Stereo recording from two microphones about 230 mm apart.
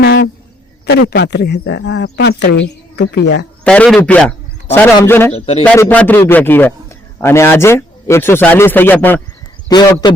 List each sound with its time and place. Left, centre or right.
0.0 s a sound: left
0.9 s speech: left
3.6 s a man's voice: centre
5.3 s speech: left
5.6 s a man's voice: centre